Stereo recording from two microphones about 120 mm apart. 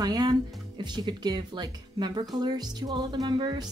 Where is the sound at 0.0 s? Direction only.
35° right (ahead or behind).